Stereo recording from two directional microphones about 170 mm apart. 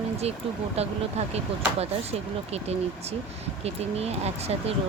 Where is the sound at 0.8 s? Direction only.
40° right (ahead or behind).